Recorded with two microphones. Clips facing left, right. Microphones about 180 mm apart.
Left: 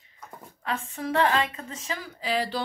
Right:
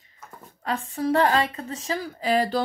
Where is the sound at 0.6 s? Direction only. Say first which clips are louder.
Right 5 dB; 35° right (ahead or behind).